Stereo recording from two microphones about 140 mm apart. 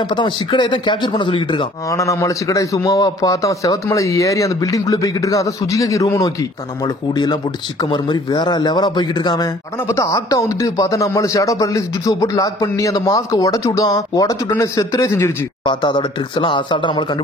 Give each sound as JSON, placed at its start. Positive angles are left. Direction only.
{"t": 0.1, "sound": "speech", "side_deg": 35}
{"t": 1.9, "sound": "a man's voice", "side_deg": 20}
{"t": 7.8, "sound": "a man's voice", "side_deg": 35}
{"t": 15.6, "sound": "speech", "side_deg": 35}